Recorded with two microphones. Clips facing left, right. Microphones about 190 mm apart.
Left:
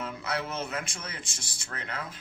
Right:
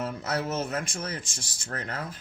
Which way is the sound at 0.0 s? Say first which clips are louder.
Right 3 dB; 45° right (ahead or behind).